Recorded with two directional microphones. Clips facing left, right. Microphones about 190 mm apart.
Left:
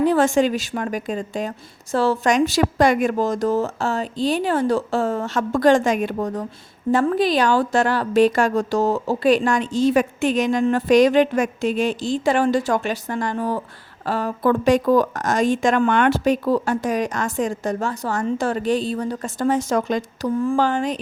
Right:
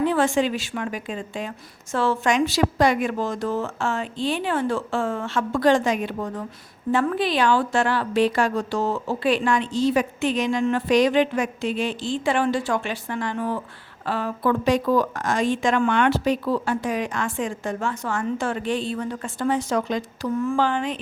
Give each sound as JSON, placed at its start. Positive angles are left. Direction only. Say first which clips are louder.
{"t": 0.0, "sound": "a woman's voice", "louder": "left 4 dB", "side_deg": 40}